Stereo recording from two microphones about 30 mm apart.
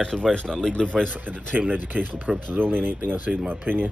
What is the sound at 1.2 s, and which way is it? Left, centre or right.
Speech, right.